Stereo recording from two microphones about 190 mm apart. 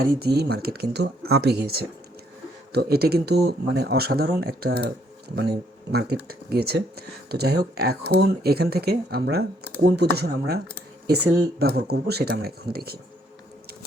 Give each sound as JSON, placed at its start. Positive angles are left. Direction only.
{"t": 0.0, "sound": "speech", "side_deg": -55}
{"t": 5.9, "sound": "speech", "side_deg": -55}